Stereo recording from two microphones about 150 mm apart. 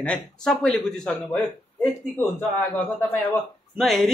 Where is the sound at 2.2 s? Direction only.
15° left (ahead or behind).